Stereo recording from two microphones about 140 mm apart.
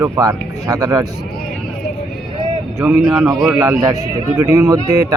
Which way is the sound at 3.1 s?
25° right (ahead or behind).